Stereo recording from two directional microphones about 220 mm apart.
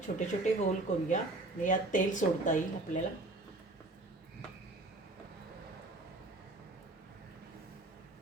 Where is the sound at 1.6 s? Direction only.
35° left (ahead or behind).